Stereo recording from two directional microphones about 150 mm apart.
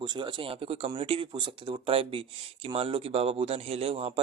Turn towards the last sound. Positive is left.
turn(degrees=-40)  # may be behind; listen again after turning